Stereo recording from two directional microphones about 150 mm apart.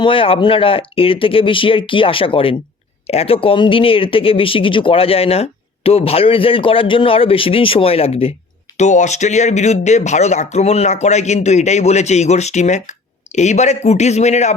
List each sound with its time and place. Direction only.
0.0 s speech: 35° left (ahead or behind)
8.8 s speech: 50° left (ahead or behind)